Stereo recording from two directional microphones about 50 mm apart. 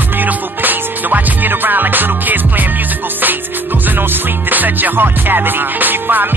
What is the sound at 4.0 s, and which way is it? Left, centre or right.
Music, right.